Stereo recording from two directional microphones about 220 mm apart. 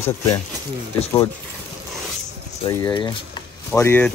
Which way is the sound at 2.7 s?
20° left (ahead or behind).